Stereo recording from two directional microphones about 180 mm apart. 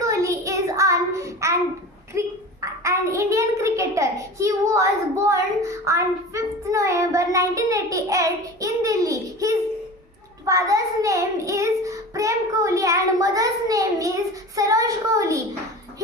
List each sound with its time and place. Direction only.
0.0 s child singing: 15° right (ahead or behind)
2.1 s a sound: 15° right (ahead or behind)
10.4 s child singing: 20° right (ahead or behind)